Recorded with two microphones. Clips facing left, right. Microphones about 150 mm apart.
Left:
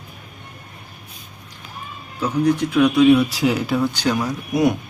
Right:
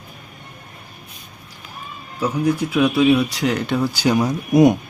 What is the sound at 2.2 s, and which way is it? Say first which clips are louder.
Speech: left 1 dB; 10° right (ahead or behind).